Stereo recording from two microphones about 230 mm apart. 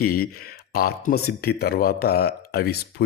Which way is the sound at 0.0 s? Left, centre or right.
Left.